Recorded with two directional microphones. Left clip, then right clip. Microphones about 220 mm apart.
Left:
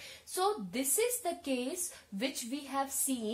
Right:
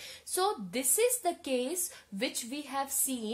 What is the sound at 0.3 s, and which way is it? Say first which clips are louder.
Speech: right 2 dB; 40° right (ahead or behind).